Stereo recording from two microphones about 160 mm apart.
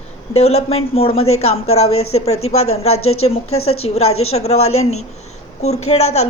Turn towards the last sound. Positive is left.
turn(degrees=45)  # may be behind; listen again after turning